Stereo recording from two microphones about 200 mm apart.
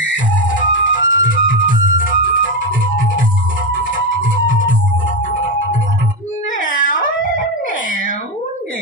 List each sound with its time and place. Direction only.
0.7 s music: 70° left (ahead or behind)
1.4 s music: 40° left (ahead or behind)
3.9 s music: 40° left (ahead or behind)
6.6 s dog: 40° left (ahead or behind)